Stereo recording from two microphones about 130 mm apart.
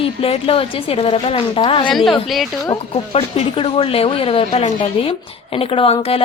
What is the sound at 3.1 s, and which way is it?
A woman's voice, 50° left (ahead or behind).